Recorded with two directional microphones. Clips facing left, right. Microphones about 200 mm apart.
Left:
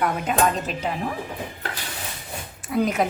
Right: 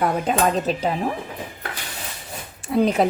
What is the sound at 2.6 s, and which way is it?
Speech, 30° right (ahead or behind).